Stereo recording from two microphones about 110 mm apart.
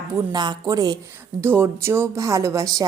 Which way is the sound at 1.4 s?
20° right (ahead or behind).